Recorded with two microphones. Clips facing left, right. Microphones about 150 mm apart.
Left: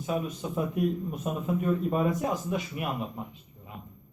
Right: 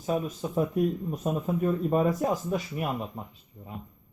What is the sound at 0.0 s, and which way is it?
Speech, 35° right (ahead or behind).